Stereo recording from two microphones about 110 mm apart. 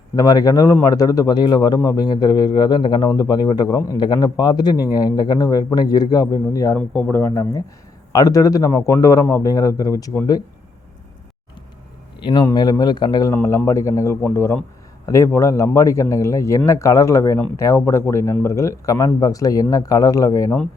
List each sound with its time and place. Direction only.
0.2 s speech: 35° left (ahead or behind)
6.7 s a man's voice: 15° left (ahead or behind); by 10.1 s 35° left (ahead or behind)
12.2 s speech: 40° left (ahead or behind)
13.3 s a man's voice: 25° left (ahead or behind)